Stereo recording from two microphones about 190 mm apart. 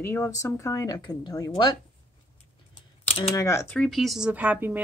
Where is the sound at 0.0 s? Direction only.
10° left (ahead or behind).